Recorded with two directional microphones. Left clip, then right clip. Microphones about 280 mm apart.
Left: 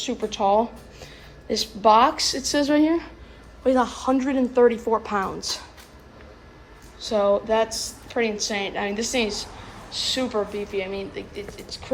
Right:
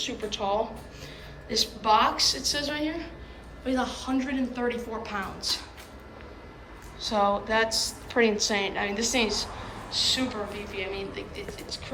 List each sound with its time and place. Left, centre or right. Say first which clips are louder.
0.0 s speech: left 7 dB; centre
1.5 s speech: left 6 dB; centre
7.0 s a woman's voice: left 4 dB; centre